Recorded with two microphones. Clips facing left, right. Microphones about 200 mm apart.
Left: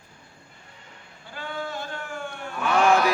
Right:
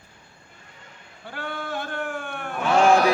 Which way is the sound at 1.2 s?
60° right (ahead or behind).